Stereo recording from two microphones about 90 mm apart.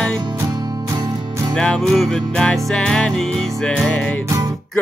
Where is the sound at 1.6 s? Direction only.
5° left (ahead or behind).